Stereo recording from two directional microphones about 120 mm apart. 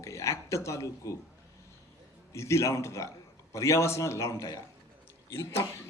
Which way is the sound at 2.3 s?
25° left (ahead or behind).